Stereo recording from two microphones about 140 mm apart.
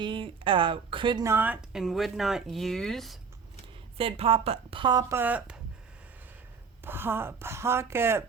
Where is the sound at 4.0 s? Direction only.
40° right (ahead or behind).